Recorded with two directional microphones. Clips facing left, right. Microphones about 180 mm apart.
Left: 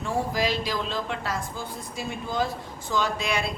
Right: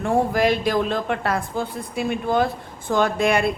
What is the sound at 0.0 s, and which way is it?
Speech, 55° right (ahead or behind).